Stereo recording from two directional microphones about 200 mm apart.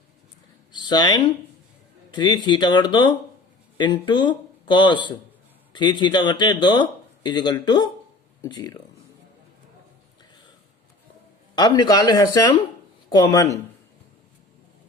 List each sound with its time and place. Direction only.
0.8 s speech: 20° left (ahead or behind)
11.5 s speech: 20° left (ahead or behind)